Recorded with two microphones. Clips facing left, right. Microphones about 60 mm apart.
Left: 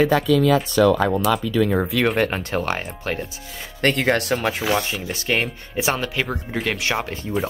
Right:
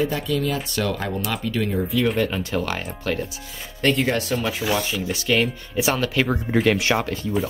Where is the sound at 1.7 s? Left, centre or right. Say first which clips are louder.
Left 2 dB; left.